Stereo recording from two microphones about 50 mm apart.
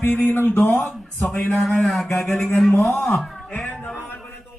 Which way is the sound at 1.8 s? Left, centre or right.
Centre.